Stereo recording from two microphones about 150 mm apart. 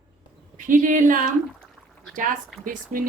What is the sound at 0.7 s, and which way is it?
Speech, 60° right (ahead or behind).